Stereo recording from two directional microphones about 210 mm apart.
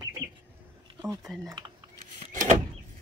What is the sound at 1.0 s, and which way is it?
Speech, 15° right (ahead or behind).